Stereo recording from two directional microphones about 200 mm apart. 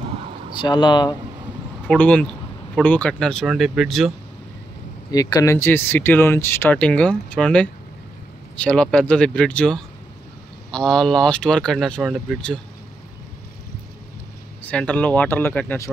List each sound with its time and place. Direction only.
0.6 s speech: 25° left (ahead or behind)
1.9 s speech: 5° left (ahead or behind)
5.1 s speech: 20° left (ahead or behind); by 12.5 s centre (ahead or behind)
14.6 s speech: 5° left (ahead or behind)